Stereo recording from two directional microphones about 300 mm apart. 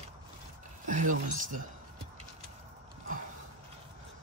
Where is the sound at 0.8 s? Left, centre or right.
Right.